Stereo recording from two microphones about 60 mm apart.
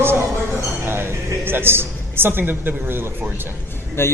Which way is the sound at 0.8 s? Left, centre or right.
Right.